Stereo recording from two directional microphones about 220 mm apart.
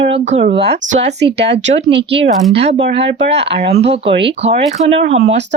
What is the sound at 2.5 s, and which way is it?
Speech, 25° right (ahead or behind).